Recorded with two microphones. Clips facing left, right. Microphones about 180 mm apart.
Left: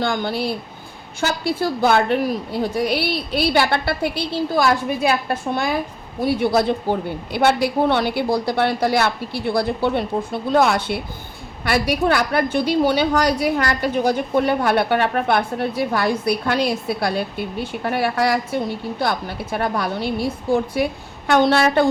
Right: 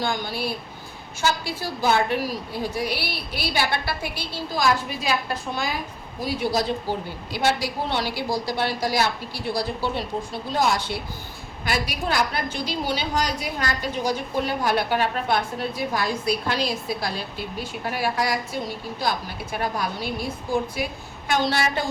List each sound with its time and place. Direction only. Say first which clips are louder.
0.0 s a woman's voice: left 5 dB; 55° left (ahead or behind)
21.2 s a woman's voice: left 7 dB; 60° left (ahead or behind)